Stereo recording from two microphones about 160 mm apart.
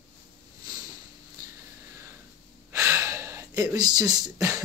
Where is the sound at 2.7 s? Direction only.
20° right (ahead or behind).